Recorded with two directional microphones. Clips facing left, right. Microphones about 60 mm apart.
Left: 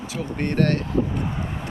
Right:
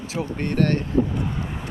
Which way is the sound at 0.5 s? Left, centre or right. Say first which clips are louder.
Even; centre.